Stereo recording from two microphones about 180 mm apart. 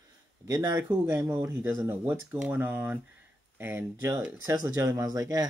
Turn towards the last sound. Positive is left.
turn(degrees=-20)  # may be behind; listen again after turning